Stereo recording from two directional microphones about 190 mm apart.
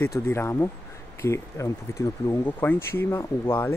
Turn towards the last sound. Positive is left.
turn(degrees=15)  # may be behind; listen again after turning